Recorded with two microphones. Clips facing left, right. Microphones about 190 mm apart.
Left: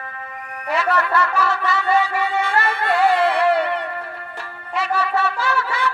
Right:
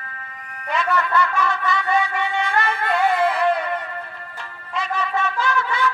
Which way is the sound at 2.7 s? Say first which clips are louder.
Left 4 dB; 65° left (ahead or behind).